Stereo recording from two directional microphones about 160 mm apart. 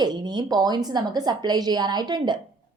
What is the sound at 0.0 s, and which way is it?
A woman's voice, 25° right (ahead or behind).